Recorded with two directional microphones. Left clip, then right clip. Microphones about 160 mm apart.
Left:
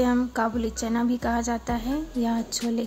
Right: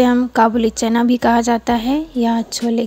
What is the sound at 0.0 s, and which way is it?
A woman's voice, 45° right (ahead or behind).